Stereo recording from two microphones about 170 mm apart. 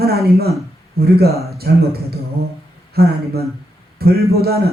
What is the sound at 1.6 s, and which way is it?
Speech, 80° right.